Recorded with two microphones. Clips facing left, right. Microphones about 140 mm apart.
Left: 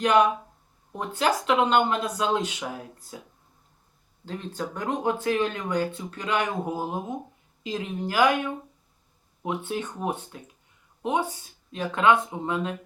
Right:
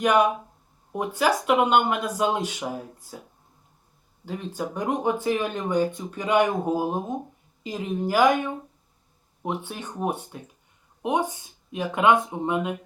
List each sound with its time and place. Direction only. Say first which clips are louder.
0.1 s speech: left 2 dB; 10° right (ahead or behind)
4.3 s speech: right 2 dB; 10° right (ahead or behind)
9.5 s speech: left 2 dB; 15° right (ahead or behind)